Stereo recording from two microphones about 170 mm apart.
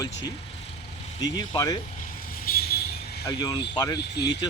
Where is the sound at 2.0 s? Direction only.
55° left (ahead or behind).